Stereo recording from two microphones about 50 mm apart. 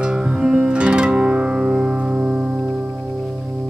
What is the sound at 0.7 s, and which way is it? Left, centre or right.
Music, centre.